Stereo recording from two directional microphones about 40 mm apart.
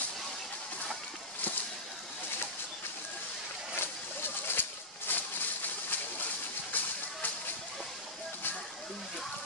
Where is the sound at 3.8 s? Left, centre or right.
Left.